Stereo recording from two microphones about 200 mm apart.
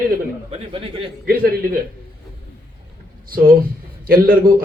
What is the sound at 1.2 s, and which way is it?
Speech, 50° right (ahead or behind).